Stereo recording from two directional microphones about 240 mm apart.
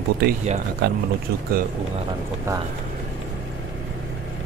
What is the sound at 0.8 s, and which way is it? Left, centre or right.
Speech, right.